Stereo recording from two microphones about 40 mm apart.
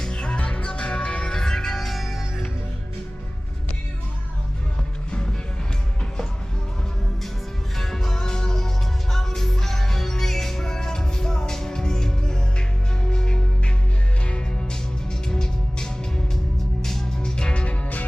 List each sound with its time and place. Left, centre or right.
0.1 s music: left
0.3 s music: left; by 2.2 s centre
7.8 s music: centre
17.2 s music: left